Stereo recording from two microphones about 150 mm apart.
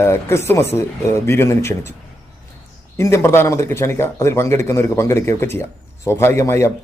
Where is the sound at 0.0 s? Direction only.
15° left (ahead or behind).